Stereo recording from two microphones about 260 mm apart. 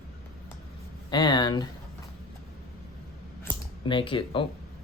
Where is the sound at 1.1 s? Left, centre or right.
Centre.